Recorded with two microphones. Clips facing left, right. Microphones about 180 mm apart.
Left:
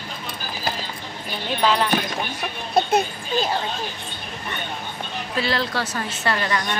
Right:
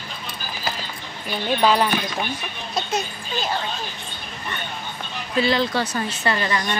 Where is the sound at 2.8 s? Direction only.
55° left (ahead or behind).